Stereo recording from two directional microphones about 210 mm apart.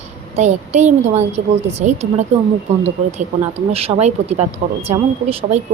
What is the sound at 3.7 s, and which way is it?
Speech, 30° right (ahead or behind).